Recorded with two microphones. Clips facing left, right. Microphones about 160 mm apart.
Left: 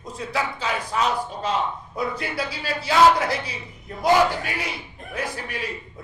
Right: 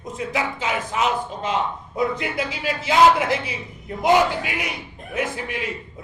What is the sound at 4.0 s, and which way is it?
A man's voice, 20° right (ahead or behind).